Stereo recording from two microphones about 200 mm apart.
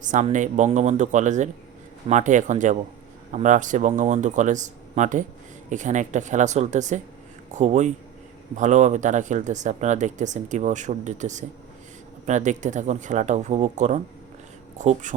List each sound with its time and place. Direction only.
0.0 s speech: 40° right (ahead or behind)